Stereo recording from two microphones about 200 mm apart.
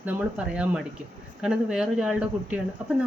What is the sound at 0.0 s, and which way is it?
Speech, 5° right (ahead or behind).